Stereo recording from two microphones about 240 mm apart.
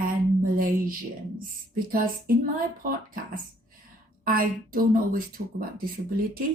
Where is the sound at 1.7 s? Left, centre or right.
Right.